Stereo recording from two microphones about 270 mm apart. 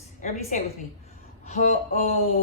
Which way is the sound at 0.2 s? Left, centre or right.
Left.